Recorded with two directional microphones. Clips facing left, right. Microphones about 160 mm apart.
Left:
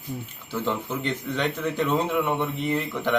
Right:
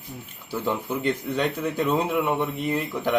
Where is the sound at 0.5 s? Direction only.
10° right (ahead or behind).